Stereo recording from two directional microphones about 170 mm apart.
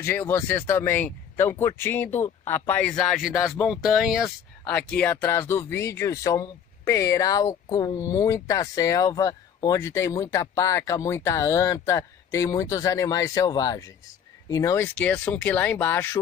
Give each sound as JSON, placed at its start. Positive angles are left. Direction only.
{"t": 0.0, "sound": "speech", "side_deg": 15}
{"t": 15.0, "sound": "speech", "side_deg": 10}